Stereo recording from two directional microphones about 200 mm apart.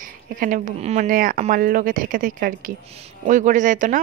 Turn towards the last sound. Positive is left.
turn(degrees=-40)  # may be behind; listen again after turning